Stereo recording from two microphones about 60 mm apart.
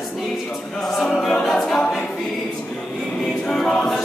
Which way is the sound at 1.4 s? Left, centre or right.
Centre.